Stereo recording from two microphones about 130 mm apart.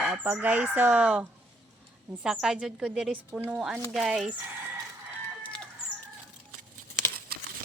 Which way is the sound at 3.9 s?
Centre (ahead or behind).